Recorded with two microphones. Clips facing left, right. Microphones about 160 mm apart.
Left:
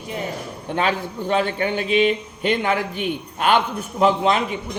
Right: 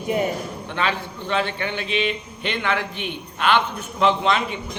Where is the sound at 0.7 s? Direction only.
45° left (ahead or behind).